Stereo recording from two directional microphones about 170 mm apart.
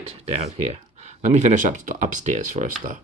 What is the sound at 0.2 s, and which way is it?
Speech, 40° right (ahead or behind).